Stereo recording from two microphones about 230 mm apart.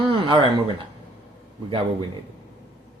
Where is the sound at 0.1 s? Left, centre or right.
Right.